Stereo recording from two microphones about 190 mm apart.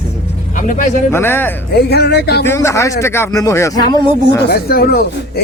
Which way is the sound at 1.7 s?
60° left (ahead or behind).